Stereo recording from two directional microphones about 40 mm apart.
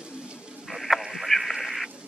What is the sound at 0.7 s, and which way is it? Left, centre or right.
Frog, centre.